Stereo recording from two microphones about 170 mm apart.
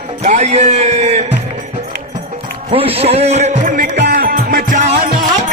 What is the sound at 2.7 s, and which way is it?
A man's voice, 35° right (ahead or behind).